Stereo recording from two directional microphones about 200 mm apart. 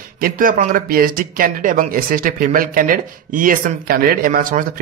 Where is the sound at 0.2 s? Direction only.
45° right (ahead or behind).